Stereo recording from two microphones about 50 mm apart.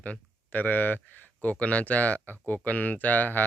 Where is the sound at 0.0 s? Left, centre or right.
Left.